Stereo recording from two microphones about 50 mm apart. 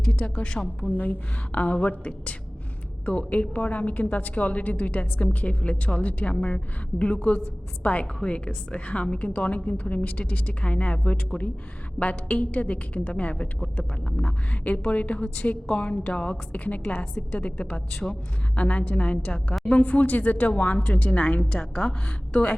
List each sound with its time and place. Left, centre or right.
0.3 s a woman's voice: centre
0.9 s a woman's voice: left
16.3 s a woman's voice: left
21.6 s a woman's voice: centre